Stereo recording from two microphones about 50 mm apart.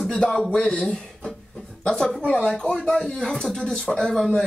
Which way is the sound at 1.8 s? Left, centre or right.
Centre.